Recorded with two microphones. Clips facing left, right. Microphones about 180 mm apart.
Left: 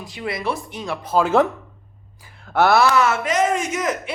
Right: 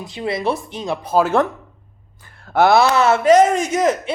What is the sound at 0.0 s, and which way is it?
Speech, 25° right (ahead or behind).